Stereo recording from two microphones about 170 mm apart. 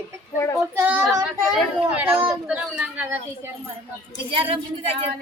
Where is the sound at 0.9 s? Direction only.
Centre (ahead or behind).